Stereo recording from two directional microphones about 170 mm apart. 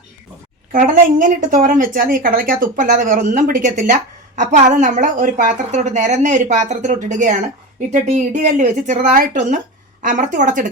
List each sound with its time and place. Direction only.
0.7 s speech: 50° right (ahead or behind)